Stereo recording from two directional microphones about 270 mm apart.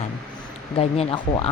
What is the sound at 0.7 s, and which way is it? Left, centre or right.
Speech, left.